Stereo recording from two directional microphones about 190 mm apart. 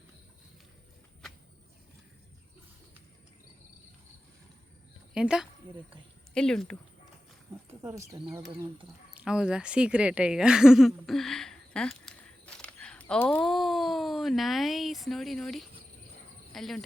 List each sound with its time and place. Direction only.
5.1 s speech: 5° right (ahead or behind)
7.7 s speech: 15° right (ahead or behind)
9.1 s speech: 5° right (ahead or behind)